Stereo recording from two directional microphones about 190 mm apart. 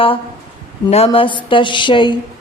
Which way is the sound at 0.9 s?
30° left (ahead or behind).